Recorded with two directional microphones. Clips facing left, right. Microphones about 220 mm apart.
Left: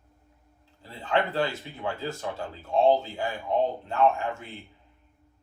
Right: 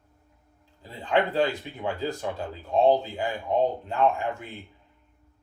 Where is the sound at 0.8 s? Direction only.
15° right (ahead or behind).